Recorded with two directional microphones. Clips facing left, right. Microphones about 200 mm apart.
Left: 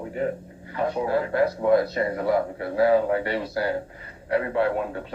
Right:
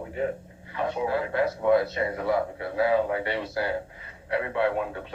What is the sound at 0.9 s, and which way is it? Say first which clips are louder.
Speech: left 3 dB; 40° left (ahead or behind).